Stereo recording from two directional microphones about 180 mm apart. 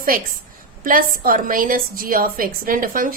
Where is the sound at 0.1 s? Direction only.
50° right (ahead or behind).